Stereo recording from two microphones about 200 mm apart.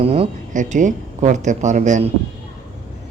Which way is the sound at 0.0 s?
30° right (ahead or behind).